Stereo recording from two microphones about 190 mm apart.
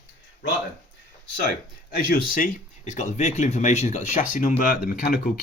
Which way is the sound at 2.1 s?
45° left (ahead or behind).